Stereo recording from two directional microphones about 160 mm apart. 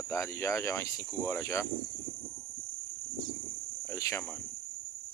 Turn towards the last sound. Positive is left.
turn(degrees=20)  # may be behind; listen again after turning